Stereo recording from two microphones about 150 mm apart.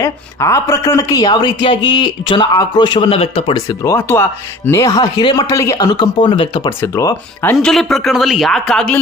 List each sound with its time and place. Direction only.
0.0 s speech: 20° left (ahead or behind); by 3.5 s 40° left (ahead or behind)
3.5 s speech: 20° left (ahead or behind); by 6.7 s 35° left (ahead or behind)
6.8 s speech: 20° left (ahead or behind)
7.5 s speech: centre (ahead or behind)